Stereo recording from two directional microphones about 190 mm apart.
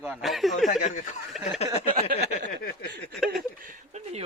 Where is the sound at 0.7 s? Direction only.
40° left (ahead or behind).